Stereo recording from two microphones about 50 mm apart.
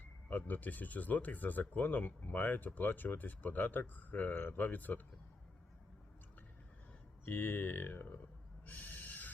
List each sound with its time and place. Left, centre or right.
0.0 s speech: left
7.3 s speech: left
8.6 s owl: left